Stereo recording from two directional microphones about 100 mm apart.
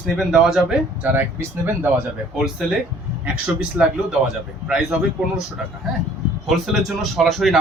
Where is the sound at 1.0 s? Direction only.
15° right (ahead or behind).